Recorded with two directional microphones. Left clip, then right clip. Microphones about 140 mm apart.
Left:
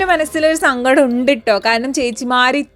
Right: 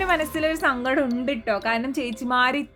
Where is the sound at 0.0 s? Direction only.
35° left (ahead or behind).